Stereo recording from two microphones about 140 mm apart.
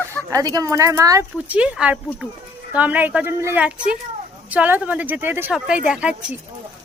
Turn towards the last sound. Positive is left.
turn(degrees=-10)  # may be behind; listen again after turning